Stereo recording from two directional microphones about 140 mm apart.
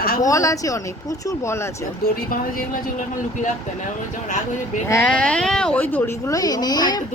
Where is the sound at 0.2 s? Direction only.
25° left (ahead or behind).